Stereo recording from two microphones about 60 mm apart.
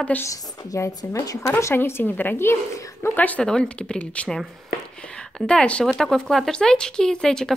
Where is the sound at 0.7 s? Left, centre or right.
Left.